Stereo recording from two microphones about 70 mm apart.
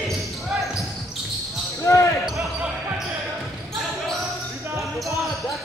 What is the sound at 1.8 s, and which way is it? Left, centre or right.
Basketball bounce, left.